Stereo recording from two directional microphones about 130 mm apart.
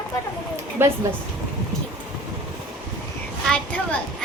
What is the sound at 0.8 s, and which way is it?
Speech, 15° right (ahead or behind).